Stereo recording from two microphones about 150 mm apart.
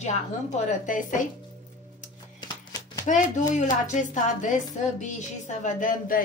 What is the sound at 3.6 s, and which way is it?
A woman's voice, 55° left (ahead or behind).